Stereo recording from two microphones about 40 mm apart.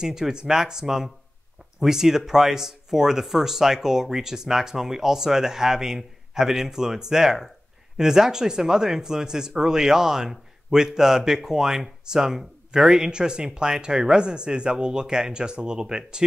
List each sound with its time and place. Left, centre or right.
0.0 s a man's voice: centre